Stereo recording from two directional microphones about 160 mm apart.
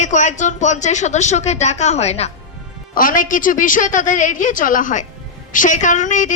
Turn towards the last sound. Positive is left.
turn(degrees=50)  # may be behind; listen again after turning